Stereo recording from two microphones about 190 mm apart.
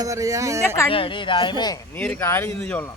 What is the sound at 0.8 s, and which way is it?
Speech, 30° left (ahead or behind).